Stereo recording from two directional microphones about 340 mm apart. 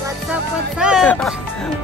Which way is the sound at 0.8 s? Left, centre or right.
Centre.